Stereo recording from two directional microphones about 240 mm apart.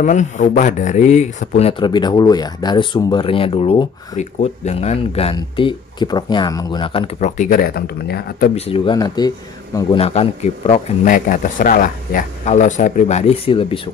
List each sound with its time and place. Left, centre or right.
0.0 s speech: left
8.5 s speech: left